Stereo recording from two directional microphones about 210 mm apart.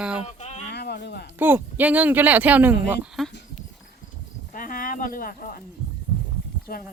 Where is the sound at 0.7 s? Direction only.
50° left (ahead or behind).